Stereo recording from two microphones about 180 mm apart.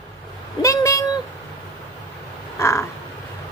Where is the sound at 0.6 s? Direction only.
15° left (ahead or behind).